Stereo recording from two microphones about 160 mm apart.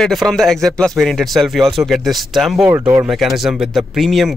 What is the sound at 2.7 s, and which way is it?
Speech, 20° right (ahead or behind).